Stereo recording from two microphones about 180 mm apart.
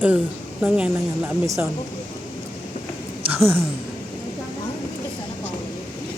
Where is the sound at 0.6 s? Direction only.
10° right (ahead or behind).